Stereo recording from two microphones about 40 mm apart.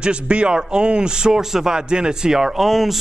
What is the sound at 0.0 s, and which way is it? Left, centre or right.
A man's voice, right.